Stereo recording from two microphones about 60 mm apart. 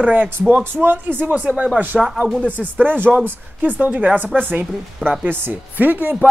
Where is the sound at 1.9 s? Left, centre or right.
Centre.